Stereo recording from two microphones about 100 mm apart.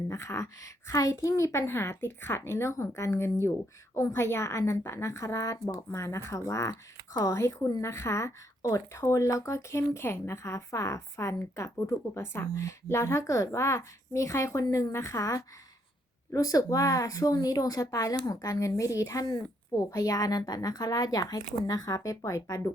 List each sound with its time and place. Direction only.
0.1 s speech: 30° left (ahead or behind)